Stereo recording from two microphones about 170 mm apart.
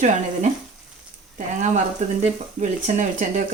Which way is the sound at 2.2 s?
45° right (ahead or behind).